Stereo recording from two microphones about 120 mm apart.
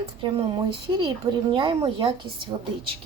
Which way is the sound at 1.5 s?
45° right (ahead or behind).